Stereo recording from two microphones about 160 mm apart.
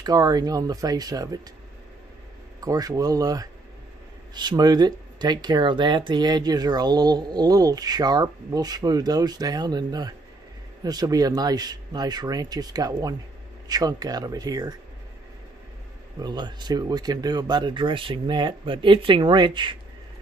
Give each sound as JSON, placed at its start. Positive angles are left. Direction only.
{"t": 0.0, "sound": "speech", "side_deg": -25}
{"t": 2.6, "sound": "speech", "side_deg": -25}
{"t": 16.2, "sound": "speech", "side_deg": -25}